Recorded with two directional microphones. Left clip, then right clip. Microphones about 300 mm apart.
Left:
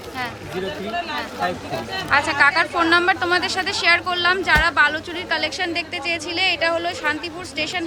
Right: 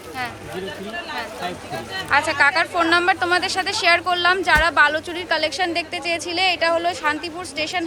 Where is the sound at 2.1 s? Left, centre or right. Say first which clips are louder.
Left 1 dB; centre.